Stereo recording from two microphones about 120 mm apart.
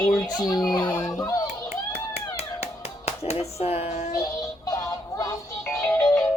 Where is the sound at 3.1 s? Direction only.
60° left (ahead or behind).